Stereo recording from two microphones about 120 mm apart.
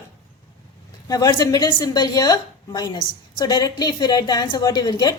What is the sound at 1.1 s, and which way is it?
A woman's voice, 30° left (ahead or behind).